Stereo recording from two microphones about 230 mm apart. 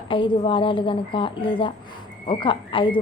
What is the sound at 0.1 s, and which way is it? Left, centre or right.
Speech, left.